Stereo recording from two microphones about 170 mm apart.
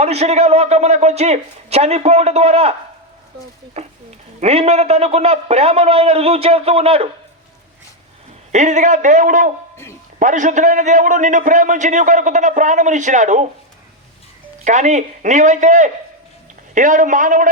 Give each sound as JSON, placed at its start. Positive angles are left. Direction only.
{"t": 0.0, "sound": "a man's voice", "side_deg": -40}
{"t": 3.8, "sound": "a man's voice", "side_deg": -40}
{"t": 8.5, "sound": "a man's voice", "side_deg": -45}
{"t": 14.6, "sound": "a man's voice", "side_deg": -45}